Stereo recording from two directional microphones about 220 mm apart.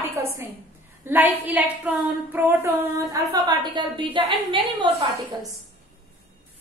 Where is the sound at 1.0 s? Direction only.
10° right (ahead or behind).